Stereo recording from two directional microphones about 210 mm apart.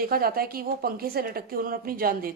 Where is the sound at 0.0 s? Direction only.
45° right (ahead or behind).